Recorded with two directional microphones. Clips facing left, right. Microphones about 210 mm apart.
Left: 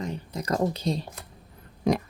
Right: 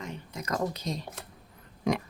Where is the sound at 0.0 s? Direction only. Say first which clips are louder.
Left 6 dB; 35° left (ahead or behind).